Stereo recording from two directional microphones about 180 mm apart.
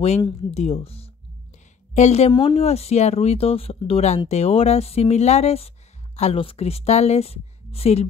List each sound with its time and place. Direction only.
0.6 s a woman's voice: 35° left (ahead or behind)